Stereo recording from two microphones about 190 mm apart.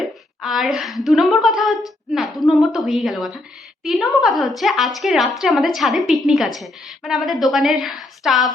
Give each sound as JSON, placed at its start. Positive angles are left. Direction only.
{"t": 0.4, "sound": "a woman's voice", "side_deg": 0}